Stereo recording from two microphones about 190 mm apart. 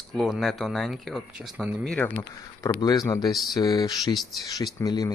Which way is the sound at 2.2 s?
15° left (ahead or behind).